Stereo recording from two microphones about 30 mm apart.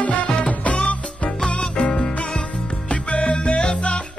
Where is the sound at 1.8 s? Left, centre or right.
Left.